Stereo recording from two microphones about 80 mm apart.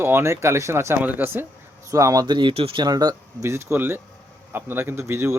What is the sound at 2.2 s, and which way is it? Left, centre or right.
Speech, right.